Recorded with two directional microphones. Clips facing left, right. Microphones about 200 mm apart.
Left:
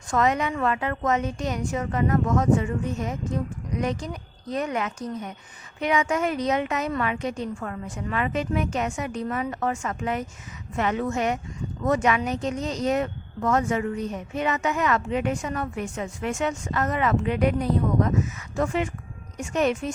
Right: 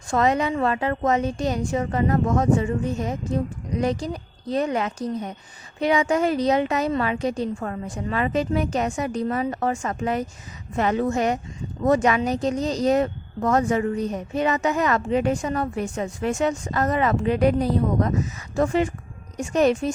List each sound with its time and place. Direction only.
0.1 s speech: 30° right (ahead or behind)